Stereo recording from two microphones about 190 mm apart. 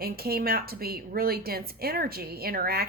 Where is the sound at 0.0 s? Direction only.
55° right (ahead or behind).